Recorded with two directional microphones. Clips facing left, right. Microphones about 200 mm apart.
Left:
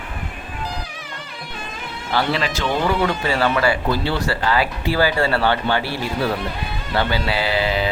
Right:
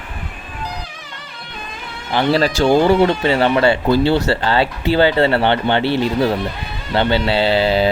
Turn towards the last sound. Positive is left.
turn(degrees=-30)  # may be behind; listen again after turning